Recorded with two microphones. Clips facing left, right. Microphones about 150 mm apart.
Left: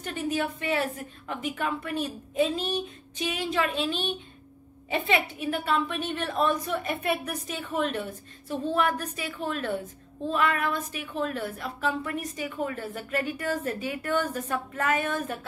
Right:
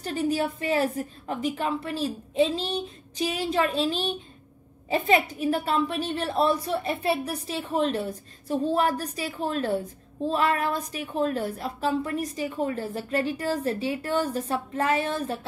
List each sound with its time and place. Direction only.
0.0 s a woman's voice: 35° right (ahead or behind)